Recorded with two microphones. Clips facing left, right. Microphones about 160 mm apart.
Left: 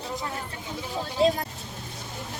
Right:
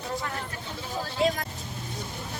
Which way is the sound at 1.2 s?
30° left (ahead or behind).